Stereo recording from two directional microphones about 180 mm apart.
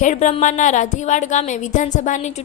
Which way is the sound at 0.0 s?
40° left (ahead or behind).